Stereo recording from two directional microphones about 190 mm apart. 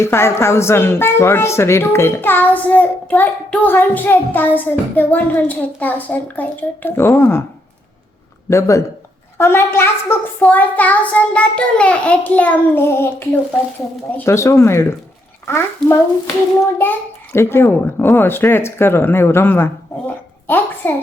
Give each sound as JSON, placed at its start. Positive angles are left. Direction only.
{"t": 0.0, "sound": "speech", "side_deg": 15}
{"t": 8.4, "sound": "speech", "side_deg": 15}